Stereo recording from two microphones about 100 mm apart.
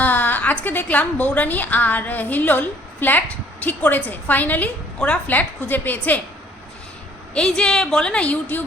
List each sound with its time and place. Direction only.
0.0 s a woman's voice: 15° left (ahead or behind)
7.3 s a woman's voice: 10° left (ahead or behind)